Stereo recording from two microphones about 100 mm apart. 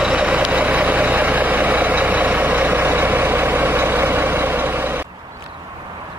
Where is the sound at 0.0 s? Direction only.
10° right (ahead or behind).